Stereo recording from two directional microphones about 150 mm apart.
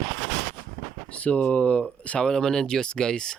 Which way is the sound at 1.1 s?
10° left (ahead or behind).